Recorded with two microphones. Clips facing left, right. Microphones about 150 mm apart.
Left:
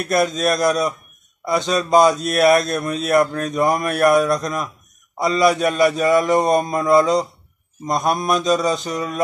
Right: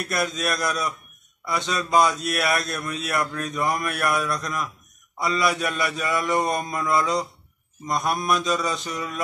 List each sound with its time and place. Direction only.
0.1 s speech: 40° left (ahead or behind)